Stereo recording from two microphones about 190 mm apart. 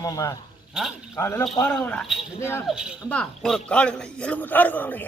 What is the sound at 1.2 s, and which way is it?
A man's voice, 15° left (ahead or behind).